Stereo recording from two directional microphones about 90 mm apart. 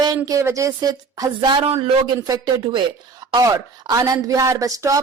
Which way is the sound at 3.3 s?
45° right (ahead or behind).